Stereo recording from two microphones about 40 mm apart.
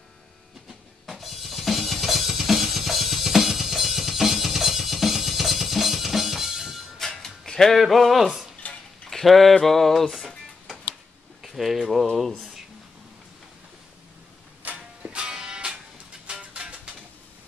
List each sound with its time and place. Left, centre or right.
1.2 s drum kit: centre
6.2 s drum: centre
7.2 s music: centre
7.7 s speech: centre
8.6 s a sound: left
9.1 s speech: centre
11.4 s speech: centre
12.3 s speech: centre
15.0 s music: right